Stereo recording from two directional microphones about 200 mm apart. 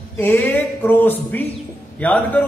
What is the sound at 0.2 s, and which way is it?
A man's voice, 10° left (ahead or behind).